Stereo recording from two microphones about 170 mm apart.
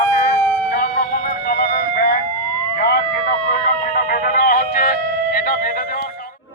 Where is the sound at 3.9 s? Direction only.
60° left (ahead or behind).